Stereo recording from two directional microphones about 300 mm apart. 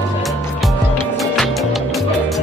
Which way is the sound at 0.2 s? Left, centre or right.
Centre.